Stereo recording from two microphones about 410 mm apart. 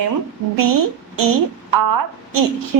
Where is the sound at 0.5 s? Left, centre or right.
Right.